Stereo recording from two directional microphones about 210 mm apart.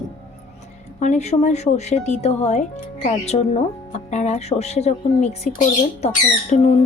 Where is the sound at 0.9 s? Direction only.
35° left (ahead or behind).